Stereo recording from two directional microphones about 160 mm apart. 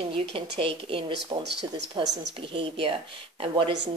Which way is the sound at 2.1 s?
35° right (ahead or behind).